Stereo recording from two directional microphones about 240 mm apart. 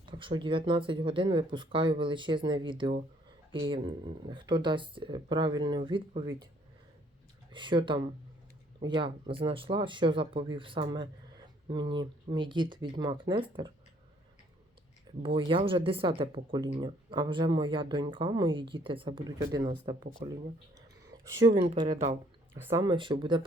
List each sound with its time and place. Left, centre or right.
0.0 s speech: centre
7.5 s speech: centre
15.2 s speech: right
21.1 s a sound: centre
21.5 s speech: right
22.5 s speech: centre